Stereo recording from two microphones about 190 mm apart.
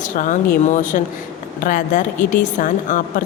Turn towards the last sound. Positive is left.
turn(degrees=45)  # may be behind; listen again after turning